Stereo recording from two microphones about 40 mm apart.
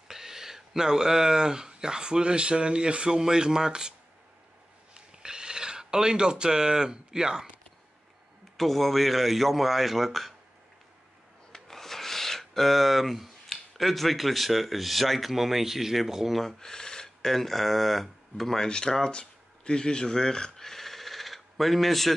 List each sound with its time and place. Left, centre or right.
0.1 s speech: centre
4.9 s a sound: centre
8.5 s speech: centre
11.5 s speech: centre
16.3 s speech: centre
18.7 s speech: centre